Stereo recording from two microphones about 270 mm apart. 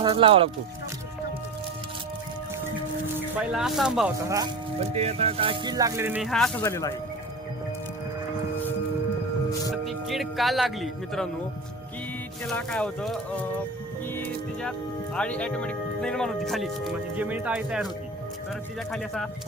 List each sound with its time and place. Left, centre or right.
0.0 s speech: centre
3.2 s speech: centre
4.8 s speech: right; by 6.9 s centre
9.8 s speech: centre
12.5 s speech: centre
18.9 s speech: centre